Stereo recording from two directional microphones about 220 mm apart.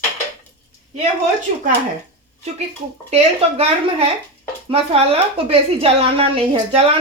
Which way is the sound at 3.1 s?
30° right (ahead or behind).